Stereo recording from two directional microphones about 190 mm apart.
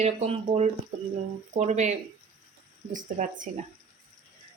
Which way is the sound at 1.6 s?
40° right (ahead or behind).